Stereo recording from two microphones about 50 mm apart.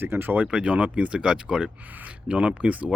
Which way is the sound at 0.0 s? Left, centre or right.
Right.